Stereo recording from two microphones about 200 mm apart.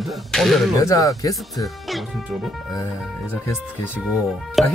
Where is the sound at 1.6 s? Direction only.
Centre (ahead or behind).